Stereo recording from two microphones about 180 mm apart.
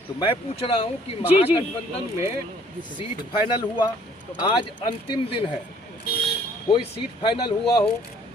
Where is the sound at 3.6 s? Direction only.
25° left (ahead or behind).